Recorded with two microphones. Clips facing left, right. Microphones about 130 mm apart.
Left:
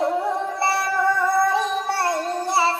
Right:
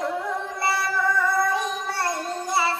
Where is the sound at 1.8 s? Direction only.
30° left (ahead or behind).